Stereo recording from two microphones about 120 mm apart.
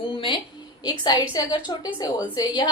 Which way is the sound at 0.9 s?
35° left (ahead or behind).